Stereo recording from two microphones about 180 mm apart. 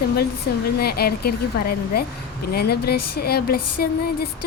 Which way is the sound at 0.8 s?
60° left (ahead or behind).